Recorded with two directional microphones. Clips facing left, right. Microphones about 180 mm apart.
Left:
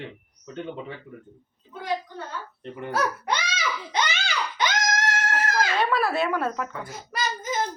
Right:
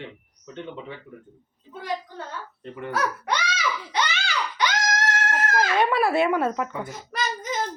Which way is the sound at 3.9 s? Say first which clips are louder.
Even; 20° left (ahead or behind).